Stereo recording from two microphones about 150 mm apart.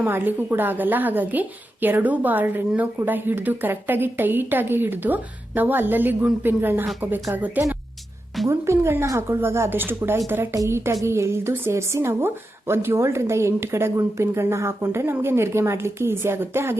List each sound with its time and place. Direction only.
0.0 s a woman's voice: 10° right (ahead or behind)